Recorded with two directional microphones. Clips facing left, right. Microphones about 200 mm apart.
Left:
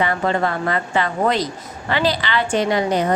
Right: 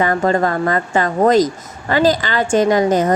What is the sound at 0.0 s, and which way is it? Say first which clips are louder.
A woman's voice: right 4 dB; 45° right (ahead or behind).